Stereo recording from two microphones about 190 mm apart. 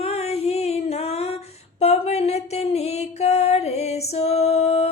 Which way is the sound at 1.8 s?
35° left (ahead or behind).